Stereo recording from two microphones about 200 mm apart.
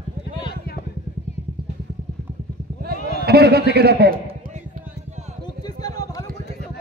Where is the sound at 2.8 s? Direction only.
55° right (ahead or behind).